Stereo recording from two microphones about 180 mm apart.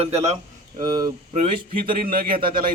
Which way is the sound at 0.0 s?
35° right (ahead or behind).